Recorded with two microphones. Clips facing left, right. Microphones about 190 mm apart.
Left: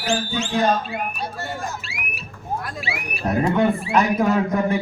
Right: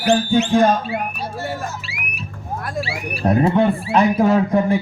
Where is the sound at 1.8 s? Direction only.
Centre (ahead or behind).